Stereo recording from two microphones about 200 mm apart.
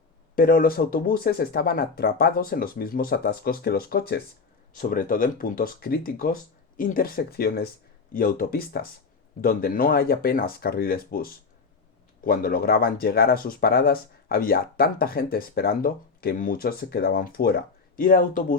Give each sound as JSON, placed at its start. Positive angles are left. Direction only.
{"t": 0.3, "sound": "speech", "side_deg": 45}